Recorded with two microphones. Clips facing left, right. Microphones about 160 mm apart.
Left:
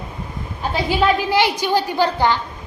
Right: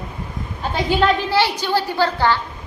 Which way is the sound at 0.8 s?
10° left (ahead or behind).